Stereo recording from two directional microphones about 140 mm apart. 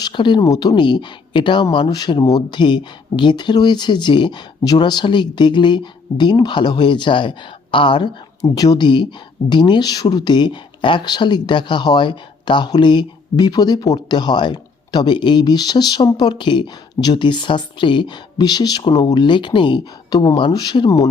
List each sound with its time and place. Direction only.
0.0 s speech: 35° left (ahead or behind)